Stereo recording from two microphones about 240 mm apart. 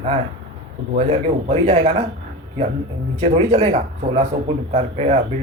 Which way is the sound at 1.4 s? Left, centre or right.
Right.